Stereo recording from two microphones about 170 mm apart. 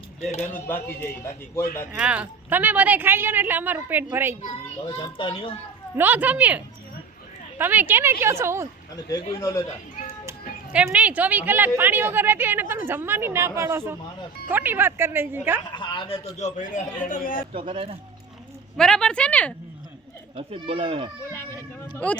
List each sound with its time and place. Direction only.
0.3 s a man's voice: 45° left (ahead or behind)
0.5 s a man's voice: 10° left (ahead or behind)
1.9 s speech: 5° right (ahead or behind)
4.4 s a child's voice: 30° left (ahead or behind)
6.0 s speech: 10° right (ahead or behind)
7.6 s speech: 10° right (ahead or behind)
9.4 s a man's voice: 20° left (ahead or behind)
10.9 s speech: 10° right (ahead or behind)
15.7 s a man's voice: 25° left (ahead or behind)
16.4 s a man's voice: 50° left (ahead or behind)
17.5 s a child's voice: 30° right (ahead or behind)
18.8 s a man's voice: 5° left (ahead or behind)
20.3 s a child's voice: 35° right (ahead or behind)
21.5 s a sound: 10° left (ahead or behind)